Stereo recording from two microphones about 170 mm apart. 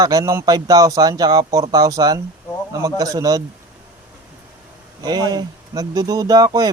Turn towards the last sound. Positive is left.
turn(degrees=-20)  # may be behind; listen again after turning